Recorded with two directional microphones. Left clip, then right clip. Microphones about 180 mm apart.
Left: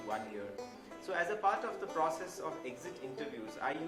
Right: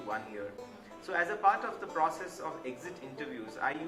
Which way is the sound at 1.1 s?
25° left (ahead or behind).